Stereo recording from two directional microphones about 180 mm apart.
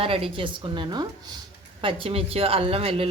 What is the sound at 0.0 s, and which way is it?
Speech, 30° right (ahead or behind).